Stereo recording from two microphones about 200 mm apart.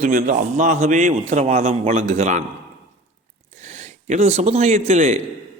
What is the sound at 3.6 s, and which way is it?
A man's voice, 35° right (ahead or behind).